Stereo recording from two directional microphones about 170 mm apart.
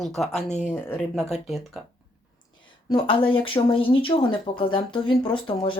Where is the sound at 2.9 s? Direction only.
30° left (ahead or behind).